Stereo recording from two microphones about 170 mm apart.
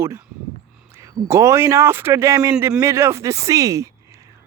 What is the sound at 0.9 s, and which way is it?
Speech, 15° right (ahead or behind).